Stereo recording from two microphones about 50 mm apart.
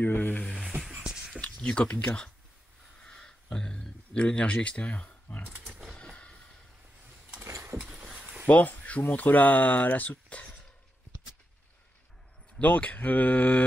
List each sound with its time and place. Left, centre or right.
0.0 s speech: left
0.7 s music: centre
1.4 s speech: left
3.0 s a sound: centre
4.1 s speech: left
5.9 s vehicle: left
7.9 s a sound: right
8.5 s speech: left
12.5 s speech: left